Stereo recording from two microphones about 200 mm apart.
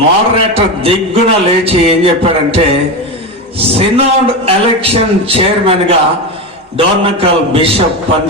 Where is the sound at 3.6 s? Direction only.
30° right (ahead or behind).